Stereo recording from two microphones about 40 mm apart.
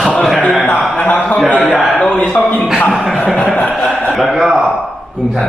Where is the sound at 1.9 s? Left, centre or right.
Left.